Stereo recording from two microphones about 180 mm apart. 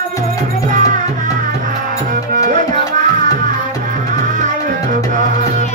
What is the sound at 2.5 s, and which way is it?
Music, 45° right (ahead or behind).